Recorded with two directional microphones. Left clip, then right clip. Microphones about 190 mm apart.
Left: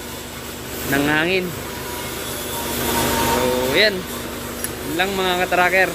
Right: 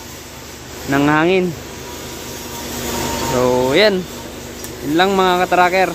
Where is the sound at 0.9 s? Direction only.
20° right (ahead or behind).